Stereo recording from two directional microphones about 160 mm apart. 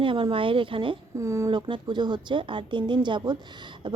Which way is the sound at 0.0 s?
35° right (ahead or behind).